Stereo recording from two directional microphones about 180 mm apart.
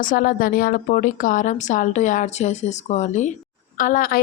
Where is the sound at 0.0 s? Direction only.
50° left (ahead or behind).